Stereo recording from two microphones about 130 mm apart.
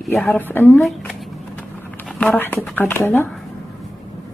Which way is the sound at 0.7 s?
Centre (ahead or behind).